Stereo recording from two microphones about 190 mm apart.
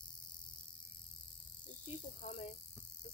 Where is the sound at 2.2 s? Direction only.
45° left (ahead or behind).